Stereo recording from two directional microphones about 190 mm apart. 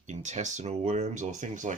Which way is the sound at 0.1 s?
35° right (ahead or behind).